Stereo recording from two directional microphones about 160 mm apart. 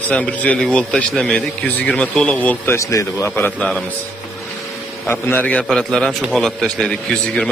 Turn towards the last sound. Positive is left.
turn(degrees=5)  # may be behind; listen again after turning